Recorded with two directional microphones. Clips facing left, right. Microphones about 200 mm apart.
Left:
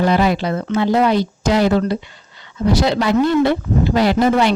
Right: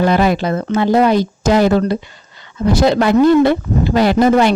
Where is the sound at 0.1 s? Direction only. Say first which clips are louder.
Right 2 dB; 50° right (ahead or behind).